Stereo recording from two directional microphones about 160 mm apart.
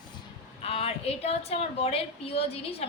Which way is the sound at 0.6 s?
35° left (ahead or behind).